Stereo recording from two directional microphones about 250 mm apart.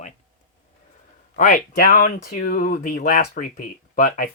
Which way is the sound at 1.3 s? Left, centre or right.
Left.